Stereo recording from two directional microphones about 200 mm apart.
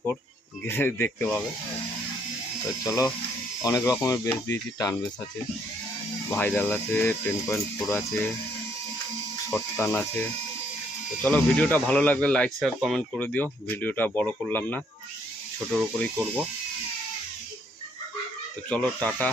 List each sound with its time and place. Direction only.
0.6 s speech: 10° left (ahead or behind)
2.8 s speech: 15° left (ahead or behind)
6.3 s speech: 5° left (ahead or behind)
9.7 s speech: 5° left (ahead or behind)
18.7 s speech: 5° left (ahead or behind)